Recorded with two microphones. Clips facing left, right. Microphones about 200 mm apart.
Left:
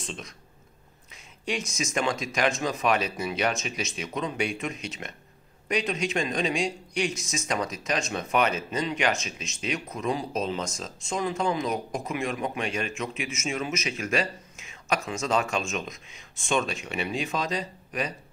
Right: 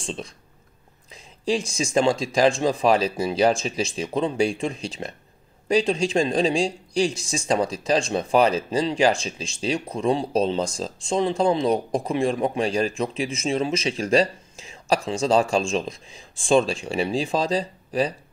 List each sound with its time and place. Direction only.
0.0 s speech: 30° right (ahead or behind)